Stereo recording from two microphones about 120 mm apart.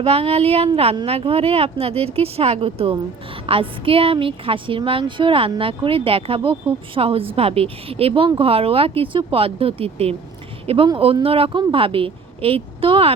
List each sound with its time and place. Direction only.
0.0 s speech: 55° right (ahead or behind)